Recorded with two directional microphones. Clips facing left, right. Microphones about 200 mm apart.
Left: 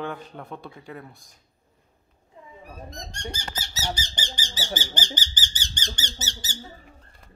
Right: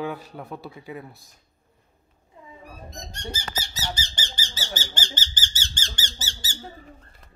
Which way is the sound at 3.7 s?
10° left (ahead or behind).